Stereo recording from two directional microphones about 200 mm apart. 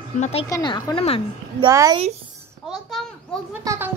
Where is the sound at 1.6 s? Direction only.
20° right (ahead or behind).